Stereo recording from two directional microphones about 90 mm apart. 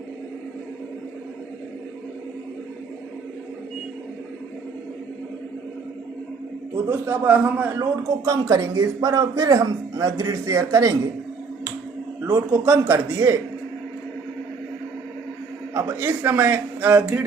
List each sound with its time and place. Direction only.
6.9 s a man's voice: 25° right (ahead or behind)
7.8 s a man's voice: 40° right (ahead or behind)
12.2 s a man's voice: 30° right (ahead or behind)
15.7 s a man's voice: 25° right (ahead or behind)